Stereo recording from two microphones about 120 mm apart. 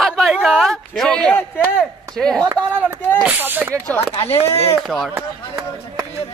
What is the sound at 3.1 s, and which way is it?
Speech, 10° right (ahead or behind).